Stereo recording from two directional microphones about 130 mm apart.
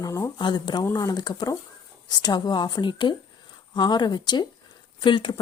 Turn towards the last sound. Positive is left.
turn(degrees=35)  # may be behind; listen again after turning